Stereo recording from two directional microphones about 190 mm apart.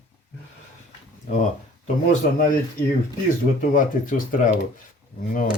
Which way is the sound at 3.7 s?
45° left (ahead or behind).